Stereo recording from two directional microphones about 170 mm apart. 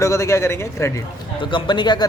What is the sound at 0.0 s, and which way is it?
A man's voice, 20° left (ahead or behind).